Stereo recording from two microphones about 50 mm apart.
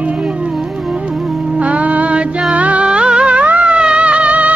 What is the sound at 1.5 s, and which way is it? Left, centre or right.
Music, right.